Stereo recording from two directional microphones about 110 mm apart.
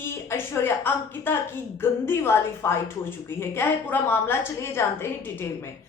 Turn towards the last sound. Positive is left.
turn(degrees=20)  # may be behind; listen again after turning